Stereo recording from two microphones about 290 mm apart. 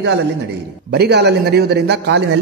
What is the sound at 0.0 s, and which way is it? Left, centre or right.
A man's voice, right.